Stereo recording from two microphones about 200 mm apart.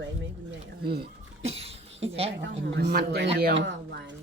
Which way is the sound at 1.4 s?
30° right (ahead or behind).